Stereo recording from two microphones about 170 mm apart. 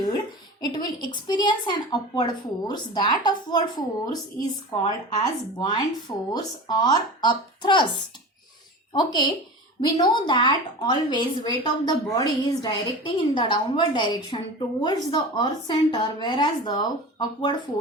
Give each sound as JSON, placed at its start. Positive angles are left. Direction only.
{"t": 0.6, "sound": "a woman's voice", "side_deg": 25}
{"t": 8.9, "sound": "a woman's voice", "side_deg": 25}